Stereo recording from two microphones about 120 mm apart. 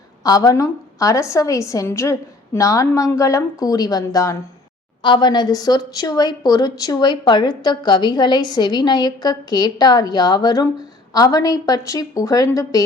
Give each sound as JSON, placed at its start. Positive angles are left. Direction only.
{"t": 0.2, "sound": "a woman's voice", "side_deg": 30}
{"t": 5.0, "sound": "a woman's voice", "side_deg": 40}